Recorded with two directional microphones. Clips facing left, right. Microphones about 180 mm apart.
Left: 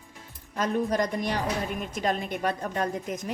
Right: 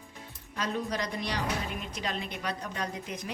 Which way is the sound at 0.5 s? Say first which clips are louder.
Left 7 dB; 50° left (ahead or behind).